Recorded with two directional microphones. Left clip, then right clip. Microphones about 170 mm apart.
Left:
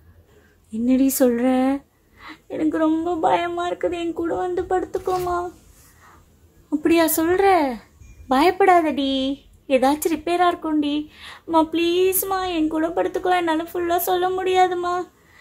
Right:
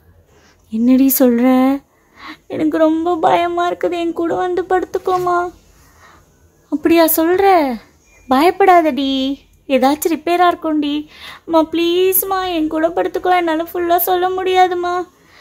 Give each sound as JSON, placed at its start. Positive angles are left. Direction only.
{"t": 0.7, "sound": "a child's voice", "side_deg": -25}
{"t": 6.7, "sound": "a child's voice", "side_deg": -20}